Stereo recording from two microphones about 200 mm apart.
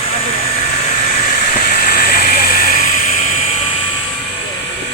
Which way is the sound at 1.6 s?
45° left (ahead or behind).